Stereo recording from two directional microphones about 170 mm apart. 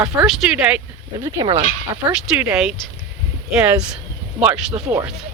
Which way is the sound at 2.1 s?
5° right (ahead or behind).